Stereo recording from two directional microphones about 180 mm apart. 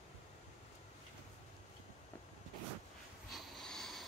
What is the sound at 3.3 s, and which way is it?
Snort, centre (ahead or behind).